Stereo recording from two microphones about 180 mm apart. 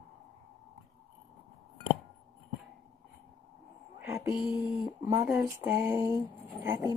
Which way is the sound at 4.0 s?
15° right (ahead or behind).